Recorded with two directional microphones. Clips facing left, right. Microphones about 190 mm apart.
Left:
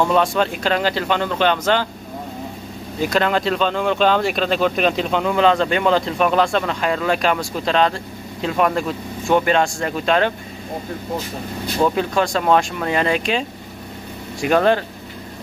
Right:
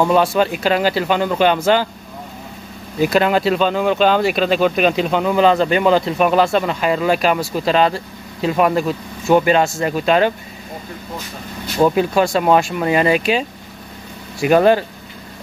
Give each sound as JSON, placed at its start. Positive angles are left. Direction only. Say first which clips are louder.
{"t": 0.0, "sound": "speech", "louder": "right 3 dB", "side_deg": -5}
{"t": 3.0, "sound": "speech", "louder": "right 4 dB", "side_deg": -5}
{"t": 11.8, "sound": "speech", "louder": "right 4 dB", "side_deg": -5}